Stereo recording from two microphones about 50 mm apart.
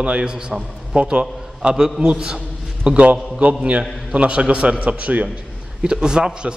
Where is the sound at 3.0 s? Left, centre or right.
Right.